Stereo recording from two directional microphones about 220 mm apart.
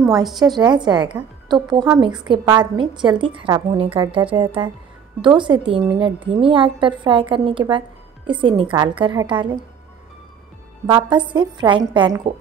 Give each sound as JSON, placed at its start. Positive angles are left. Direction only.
{"t": 0.0, "sound": "a woman's voice", "side_deg": -15}
{"t": 10.9, "sound": "a woman's voice", "side_deg": -20}